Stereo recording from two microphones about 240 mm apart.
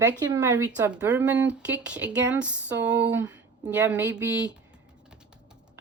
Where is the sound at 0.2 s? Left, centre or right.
Centre.